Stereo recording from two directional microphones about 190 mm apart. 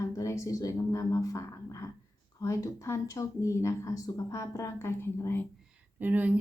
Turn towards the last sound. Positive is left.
turn(degrees=-10)  # may be behind; listen again after turning